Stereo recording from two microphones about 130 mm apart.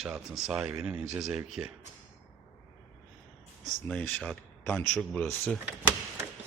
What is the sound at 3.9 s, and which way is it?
Speech, 5° left (ahead or behind).